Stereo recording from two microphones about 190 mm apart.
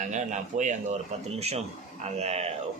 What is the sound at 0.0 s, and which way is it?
Speech, 40° right (ahead or behind).